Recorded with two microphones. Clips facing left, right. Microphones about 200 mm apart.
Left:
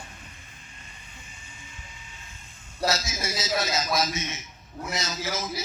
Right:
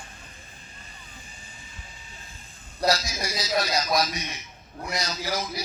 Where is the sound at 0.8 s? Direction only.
35° right (ahead or behind).